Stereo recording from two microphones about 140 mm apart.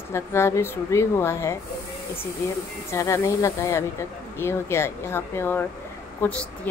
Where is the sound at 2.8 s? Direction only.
20° left (ahead or behind).